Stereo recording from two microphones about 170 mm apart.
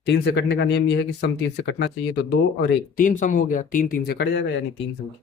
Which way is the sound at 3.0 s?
50° left (ahead or behind).